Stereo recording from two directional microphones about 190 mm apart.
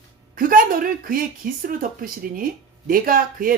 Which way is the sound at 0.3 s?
45° right (ahead or behind).